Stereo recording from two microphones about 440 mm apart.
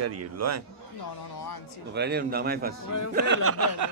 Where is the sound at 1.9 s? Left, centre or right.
Right.